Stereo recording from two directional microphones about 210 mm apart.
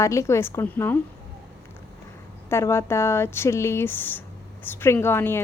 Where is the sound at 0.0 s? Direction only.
15° left (ahead or behind).